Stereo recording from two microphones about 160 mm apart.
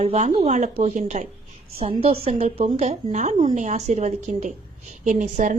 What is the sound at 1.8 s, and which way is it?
A woman's voice, 35° right (ahead or behind).